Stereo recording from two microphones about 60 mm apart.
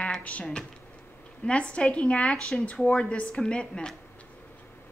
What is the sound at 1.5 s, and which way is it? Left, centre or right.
A woman's voice, centre.